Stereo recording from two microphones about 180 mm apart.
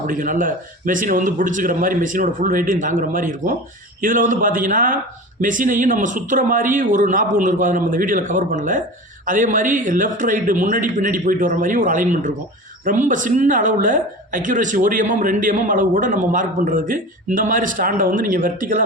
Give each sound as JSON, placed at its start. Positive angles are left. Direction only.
{"t": 0.1, "sound": "a woman's voice", "side_deg": -45}